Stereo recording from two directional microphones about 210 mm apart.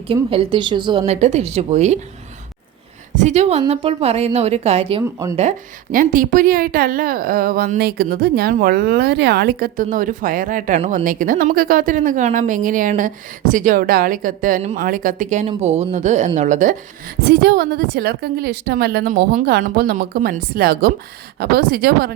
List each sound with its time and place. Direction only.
0.1 s a woman's voice: 25° right (ahead or behind)
3.2 s a woman's voice: 35° right (ahead or behind)
17.2 s a woman's voice: 50° right (ahead or behind)